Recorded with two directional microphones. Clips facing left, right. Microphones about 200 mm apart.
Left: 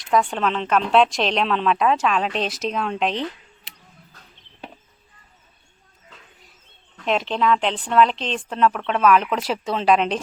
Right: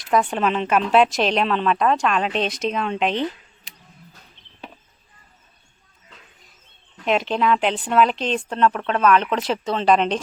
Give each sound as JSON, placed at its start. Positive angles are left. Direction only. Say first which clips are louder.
{"t": 0.1, "sound": "a woman's voice", "louder": "right 1 dB", "side_deg": -5}
{"t": 6.9, "sound": "a woman's voice", "louder": "right 2 dB", "side_deg": -5}